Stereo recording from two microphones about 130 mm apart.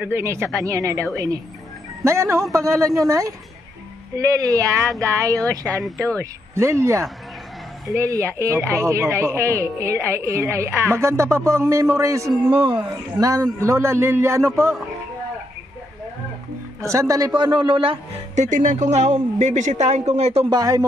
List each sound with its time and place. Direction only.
0.0 s speech: 20° right (ahead or behind)
4.4 s speech: 25° right (ahead or behind)
12.4 s a man's voice: 40° right (ahead or behind)
12.9 s speech: 25° right (ahead or behind)
16.8 s a man's voice: 25° right (ahead or behind); by 17.9 s 40° right (ahead or behind)
18.3 s speech: 70° right (ahead or behind)
20.4 s speech: 30° right (ahead or behind)